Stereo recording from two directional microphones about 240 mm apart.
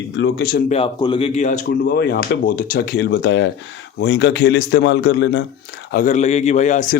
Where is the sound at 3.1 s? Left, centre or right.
Left.